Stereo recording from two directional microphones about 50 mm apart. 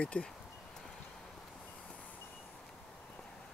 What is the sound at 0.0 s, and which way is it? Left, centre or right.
Speech, left.